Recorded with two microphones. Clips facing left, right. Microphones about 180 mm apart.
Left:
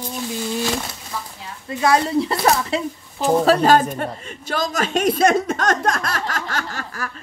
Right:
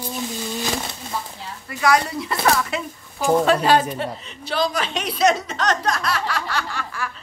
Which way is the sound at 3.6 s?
45° left (ahead or behind).